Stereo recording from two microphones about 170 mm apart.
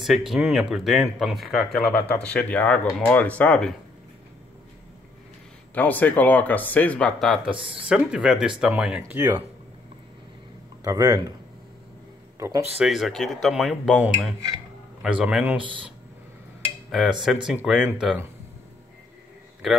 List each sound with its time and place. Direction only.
0.0 s speech: centre (ahead or behind)
5.8 s speech: 10° left (ahead or behind); by 9.4 s 10° right (ahead or behind)
10.8 s speech: 20° right (ahead or behind)
12.4 s speech: 20° right (ahead or behind)
12.7 s speech: centre (ahead or behind)
16.9 s speech: centre (ahead or behind)